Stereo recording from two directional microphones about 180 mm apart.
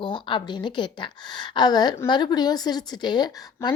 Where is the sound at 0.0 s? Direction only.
25° left (ahead or behind).